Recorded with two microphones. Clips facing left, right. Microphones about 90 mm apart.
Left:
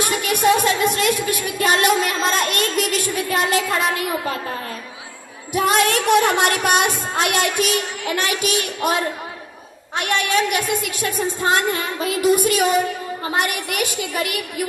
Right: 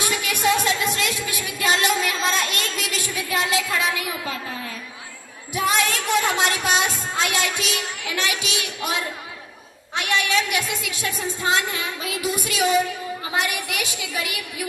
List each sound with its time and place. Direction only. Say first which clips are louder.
0.0 s music: left 4 dB; 50° left (ahead or behind)
5.5 s music: left 5 dB; 55° left (ahead or behind)